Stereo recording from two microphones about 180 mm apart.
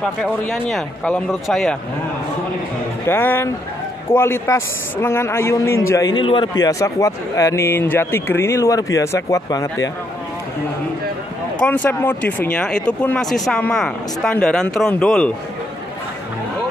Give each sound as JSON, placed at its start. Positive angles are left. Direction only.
{"t": 0.0, "sound": "speech", "side_deg": 0}
{"t": 3.1, "sound": "a man's voice", "side_deg": 10}
{"t": 11.6, "sound": "a man's voice", "side_deg": 10}